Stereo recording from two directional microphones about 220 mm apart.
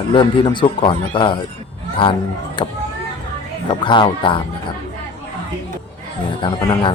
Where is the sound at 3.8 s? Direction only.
20° left (ahead or behind).